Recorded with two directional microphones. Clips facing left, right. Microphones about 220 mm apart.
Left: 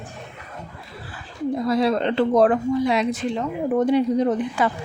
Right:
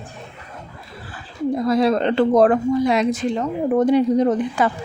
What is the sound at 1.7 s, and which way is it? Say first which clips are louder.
A woman's voice: right 3 dB; 45° right (ahead or behind).